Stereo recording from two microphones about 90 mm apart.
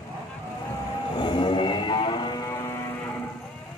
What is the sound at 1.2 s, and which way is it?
Music, 60° left (ahead or behind).